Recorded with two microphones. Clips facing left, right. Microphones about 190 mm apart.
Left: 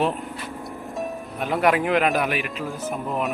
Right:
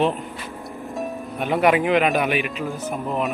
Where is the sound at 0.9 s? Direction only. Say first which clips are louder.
Right 2 dB; centre (ahead or behind).